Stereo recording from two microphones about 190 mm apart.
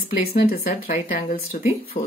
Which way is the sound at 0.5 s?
45° left (ahead or behind).